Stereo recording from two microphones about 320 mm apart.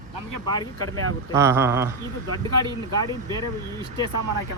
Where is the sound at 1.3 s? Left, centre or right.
Centre.